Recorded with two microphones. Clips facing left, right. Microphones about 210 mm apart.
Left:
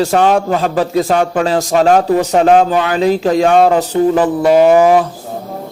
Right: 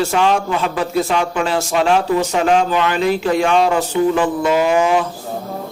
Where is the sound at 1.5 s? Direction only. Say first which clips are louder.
Left 5 dB; 40° left (ahead or behind).